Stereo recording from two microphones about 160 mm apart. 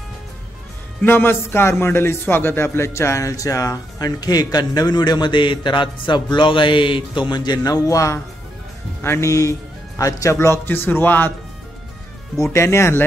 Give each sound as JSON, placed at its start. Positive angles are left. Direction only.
{"t": 1.0, "sound": "a man's voice", "side_deg": 15}
{"t": 12.5, "sound": "speech", "side_deg": 15}